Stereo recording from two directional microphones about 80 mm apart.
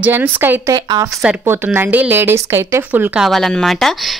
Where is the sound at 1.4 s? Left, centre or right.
Right.